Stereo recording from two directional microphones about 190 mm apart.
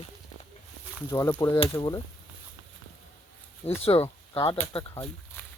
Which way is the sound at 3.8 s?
30° left (ahead or behind).